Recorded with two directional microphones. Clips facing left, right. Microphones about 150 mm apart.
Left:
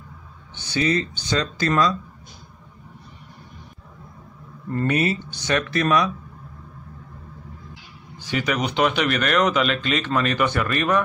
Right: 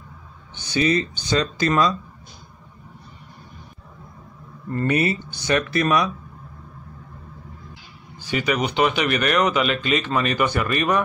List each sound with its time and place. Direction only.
0.6 s speech: 15° right (ahead or behind)
4.9 s speech: 10° right (ahead or behind)
8.3 s speech: 5° right (ahead or behind)